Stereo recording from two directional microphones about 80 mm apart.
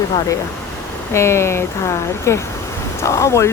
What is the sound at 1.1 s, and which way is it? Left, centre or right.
Speech, left.